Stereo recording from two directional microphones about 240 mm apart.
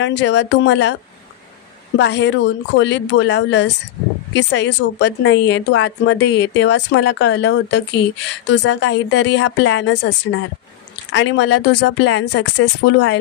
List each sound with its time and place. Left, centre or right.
0.0 s a woman's voice: left
2.0 s a woman's voice: left